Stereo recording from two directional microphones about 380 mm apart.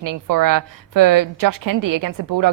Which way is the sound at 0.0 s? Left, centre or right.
Right.